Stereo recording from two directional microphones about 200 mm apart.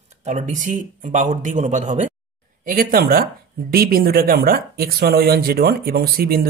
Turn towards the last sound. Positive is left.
turn(degrees=-50)  # may be behind; listen again after turning